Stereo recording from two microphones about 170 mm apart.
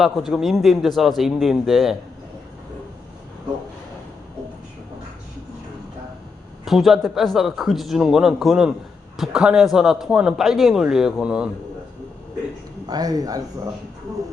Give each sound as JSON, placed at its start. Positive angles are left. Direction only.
{"t": 0.0, "sound": "a man's voice", "side_deg": 0}
{"t": 6.7, "sound": "a man's voice", "side_deg": 0}
{"t": 12.9, "sound": "a man's voice", "side_deg": -20}